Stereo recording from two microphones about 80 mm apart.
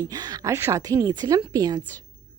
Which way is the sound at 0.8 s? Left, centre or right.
Right.